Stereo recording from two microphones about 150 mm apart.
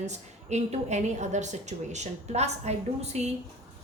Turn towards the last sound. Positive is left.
turn(degrees=-45)  # may be behind; listen again after turning